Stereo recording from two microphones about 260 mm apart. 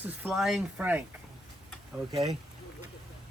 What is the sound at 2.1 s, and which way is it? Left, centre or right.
Speech, centre.